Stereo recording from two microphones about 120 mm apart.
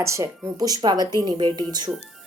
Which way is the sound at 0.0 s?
25° right (ahead or behind).